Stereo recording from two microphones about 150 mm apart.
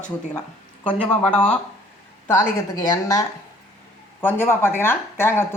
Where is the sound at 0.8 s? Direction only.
10° left (ahead or behind).